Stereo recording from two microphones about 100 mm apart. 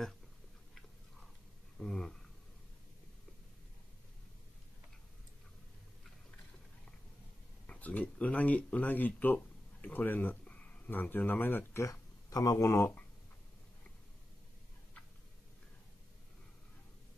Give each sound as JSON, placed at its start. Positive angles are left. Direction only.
{"t": 1.8, "sound": "speech", "side_deg": 5}
{"t": 7.6, "sound": "speech", "side_deg": 15}